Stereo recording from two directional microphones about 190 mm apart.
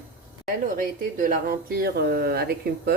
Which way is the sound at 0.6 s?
45° right (ahead or behind).